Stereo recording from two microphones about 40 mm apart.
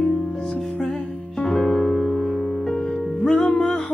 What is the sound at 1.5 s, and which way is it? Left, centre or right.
Music, centre.